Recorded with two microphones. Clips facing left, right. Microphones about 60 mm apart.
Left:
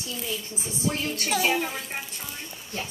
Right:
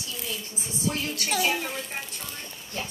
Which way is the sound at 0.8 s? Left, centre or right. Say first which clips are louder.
Left 1 dB; left.